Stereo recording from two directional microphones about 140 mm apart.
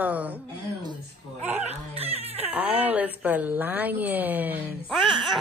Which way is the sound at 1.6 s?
45° right (ahead or behind).